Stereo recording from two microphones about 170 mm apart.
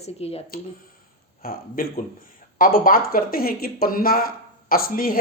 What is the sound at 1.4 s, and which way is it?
Speech, 60° left (ahead or behind).